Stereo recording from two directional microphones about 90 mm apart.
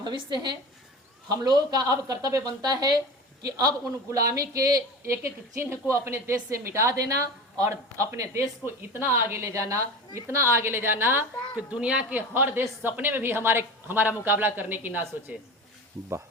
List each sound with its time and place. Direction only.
0.0 s a woman's voice: 60° right (ahead or behind)
4.1 s a woman's voice: 40° right (ahead or behind)
11.7 s speech: 15° right (ahead or behind)